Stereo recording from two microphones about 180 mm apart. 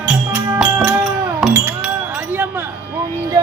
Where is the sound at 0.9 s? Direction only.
10° right (ahead or behind).